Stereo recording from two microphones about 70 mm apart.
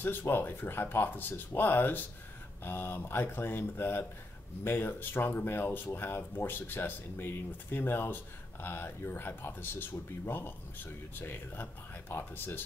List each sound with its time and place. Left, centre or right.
0.0 s speech: left